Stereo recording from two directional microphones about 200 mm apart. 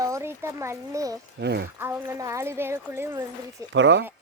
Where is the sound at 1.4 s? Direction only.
55° right (ahead or behind).